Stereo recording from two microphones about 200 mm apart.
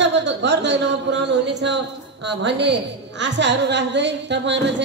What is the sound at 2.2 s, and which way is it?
A woman's voice, 60° right (ahead or behind).